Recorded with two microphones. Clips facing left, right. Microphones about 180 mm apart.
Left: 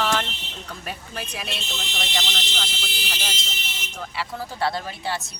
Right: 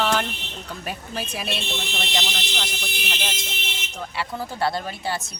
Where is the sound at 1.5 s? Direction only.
60° right (ahead or behind).